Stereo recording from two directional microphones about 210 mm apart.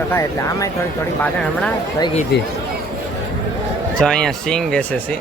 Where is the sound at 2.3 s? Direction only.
50° left (ahead or behind).